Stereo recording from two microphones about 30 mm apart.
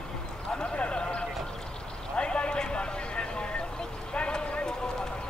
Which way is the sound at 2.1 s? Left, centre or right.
Left.